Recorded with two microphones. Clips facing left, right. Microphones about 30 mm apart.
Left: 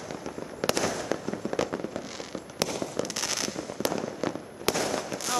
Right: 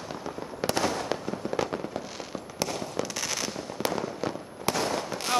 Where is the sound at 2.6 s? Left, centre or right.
Centre.